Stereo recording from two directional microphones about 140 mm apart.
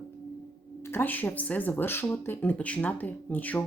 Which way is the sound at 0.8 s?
15° left (ahead or behind).